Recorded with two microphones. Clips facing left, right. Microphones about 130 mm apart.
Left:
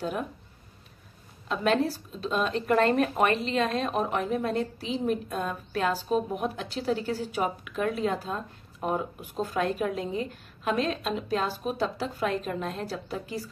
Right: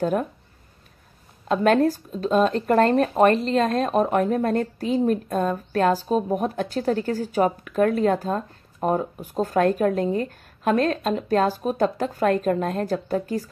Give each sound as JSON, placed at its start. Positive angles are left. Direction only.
{"t": 0.0, "sound": "speech", "side_deg": -45}
{"t": 1.5, "sound": "speech", "side_deg": -50}